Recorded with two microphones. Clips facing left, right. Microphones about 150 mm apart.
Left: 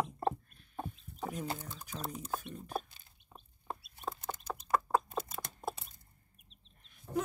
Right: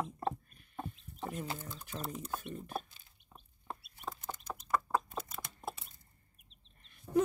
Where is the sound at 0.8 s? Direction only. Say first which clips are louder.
Left 1 dB; 5° left (ahead or behind).